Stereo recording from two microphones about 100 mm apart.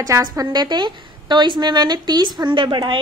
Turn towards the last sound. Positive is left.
turn(degrees=-50)  # may be behind; listen again after turning